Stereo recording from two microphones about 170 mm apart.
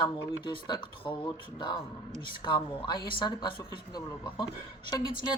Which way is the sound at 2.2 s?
30° left (ahead or behind).